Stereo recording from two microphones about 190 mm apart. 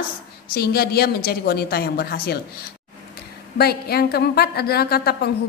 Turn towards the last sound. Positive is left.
turn(degrees=55)  # may be behind; listen again after turning